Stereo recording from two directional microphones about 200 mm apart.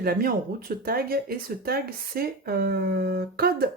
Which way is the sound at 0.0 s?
50° right (ahead or behind).